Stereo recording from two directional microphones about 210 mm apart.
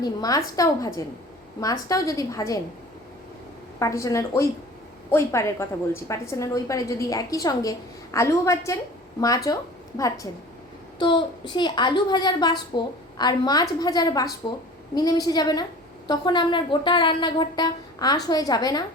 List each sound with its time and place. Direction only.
0.0 s a woman's voice: 15° left (ahead or behind)
3.8 s a woman's voice: 15° left (ahead or behind)
11.0 s speech: 20° left (ahead or behind)